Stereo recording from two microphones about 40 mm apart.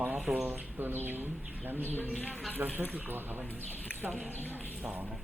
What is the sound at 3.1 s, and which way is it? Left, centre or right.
Speech, right.